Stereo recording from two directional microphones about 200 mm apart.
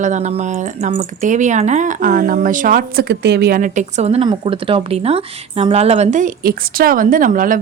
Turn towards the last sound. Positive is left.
turn(degrees=-40)  # may be behind; listen again after turning